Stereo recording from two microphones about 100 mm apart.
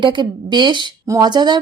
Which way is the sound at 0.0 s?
50° right (ahead or behind).